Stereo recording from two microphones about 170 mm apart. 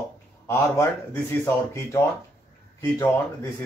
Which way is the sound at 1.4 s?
15° left (ahead or behind).